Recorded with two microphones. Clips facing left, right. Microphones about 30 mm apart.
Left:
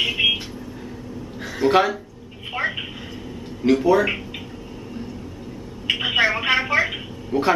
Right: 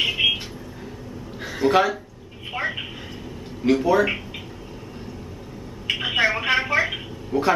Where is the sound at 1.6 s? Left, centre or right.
Centre.